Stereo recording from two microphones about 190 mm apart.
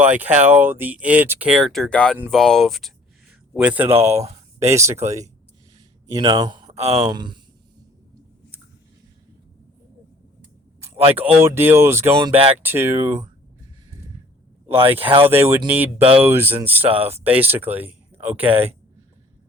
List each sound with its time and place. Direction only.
0.0 s speech: 10° right (ahead or behind)
6.1 s speech: 25° right (ahead or behind)
10.8 s a sound: 30° right (ahead or behind)
11.4 s speech: 10° right (ahead or behind)
12.3 s speech: 30° right (ahead or behind)
12.5 s speech: 10° right (ahead or behind)
14.9 s speech: 30° right (ahead or behind)
15.3 s speech: 10° right (ahead or behind)